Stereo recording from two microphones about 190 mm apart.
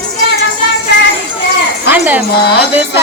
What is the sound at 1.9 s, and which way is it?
Music, 10° right (ahead or behind).